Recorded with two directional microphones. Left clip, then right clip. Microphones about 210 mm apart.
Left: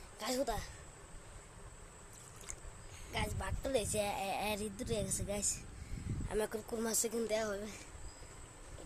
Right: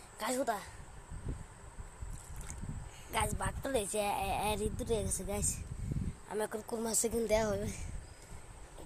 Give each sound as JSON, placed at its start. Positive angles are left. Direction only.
{"t": 0.2, "sound": "a woman's voice", "side_deg": 0}
{"t": 3.1, "sound": "a woman's voice", "side_deg": -10}
{"t": 7.3, "sound": "a woman's voice", "side_deg": -20}